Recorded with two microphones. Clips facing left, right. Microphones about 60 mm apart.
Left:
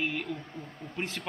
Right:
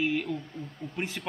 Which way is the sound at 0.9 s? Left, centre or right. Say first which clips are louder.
Right 1 dB; centre.